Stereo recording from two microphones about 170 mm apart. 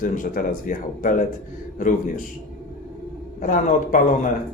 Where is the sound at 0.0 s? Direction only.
50° left (ahead or behind).